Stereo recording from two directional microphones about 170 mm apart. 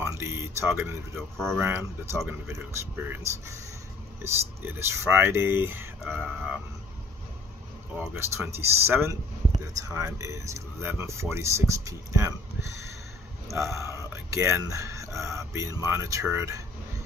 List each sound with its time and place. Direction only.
0.0 s a sound: 15° right (ahead or behind)
1.6 s speech: 15° right (ahead or behind)
4.2 s speech: 15° right (ahead or behind)
7.9 s speech: 10° right (ahead or behind)
13.5 s speech: 15° right (ahead or behind)